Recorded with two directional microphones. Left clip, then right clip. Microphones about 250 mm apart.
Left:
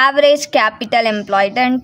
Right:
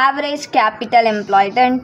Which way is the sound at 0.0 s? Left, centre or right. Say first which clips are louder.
Left 5 dB; left.